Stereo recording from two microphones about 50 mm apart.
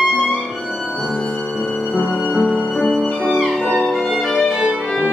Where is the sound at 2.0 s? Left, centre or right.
Centre.